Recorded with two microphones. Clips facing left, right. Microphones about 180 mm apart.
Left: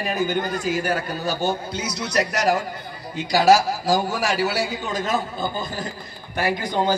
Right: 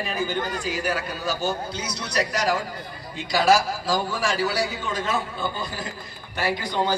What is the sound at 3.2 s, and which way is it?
A man's voice, 40° left (ahead or behind).